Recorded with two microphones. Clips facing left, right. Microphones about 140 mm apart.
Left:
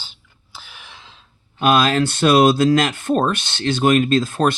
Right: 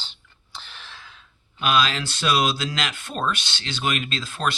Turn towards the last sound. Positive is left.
turn(degrees=50)  # may be behind; listen again after turning